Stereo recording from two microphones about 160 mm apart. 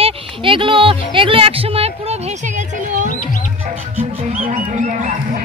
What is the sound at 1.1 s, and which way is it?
Speech, 35° right (ahead or behind).